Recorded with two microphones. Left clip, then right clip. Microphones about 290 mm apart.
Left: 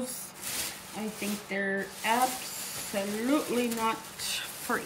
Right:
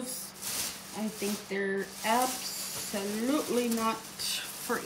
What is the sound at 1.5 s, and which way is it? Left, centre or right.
A woman's voice, centre.